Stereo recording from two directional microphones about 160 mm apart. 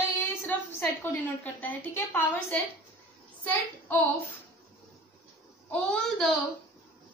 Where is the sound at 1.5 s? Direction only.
10° left (ahead or behind).